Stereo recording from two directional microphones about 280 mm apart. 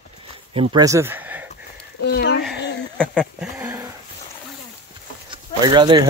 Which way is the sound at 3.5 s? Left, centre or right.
Centre.